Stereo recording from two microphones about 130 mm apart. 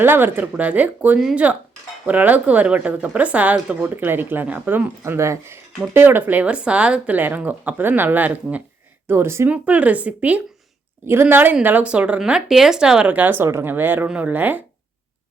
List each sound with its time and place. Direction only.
0.0 s a woman's voice: 15° right (ahead or behind)